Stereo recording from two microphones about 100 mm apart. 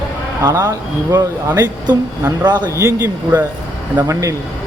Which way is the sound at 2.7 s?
30° right (ahead or behind).